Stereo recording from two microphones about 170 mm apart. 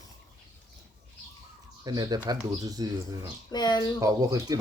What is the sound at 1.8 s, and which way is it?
Speech, 20° right (ahead or behind).